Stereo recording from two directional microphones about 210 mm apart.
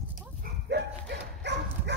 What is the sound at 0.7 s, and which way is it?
Dog, 55° right (ahead or behind).